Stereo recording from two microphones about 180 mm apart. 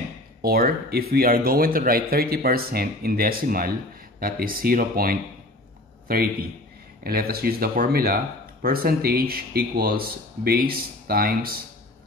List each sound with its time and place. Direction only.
0.4 s speech: 55° right (ahead or behind)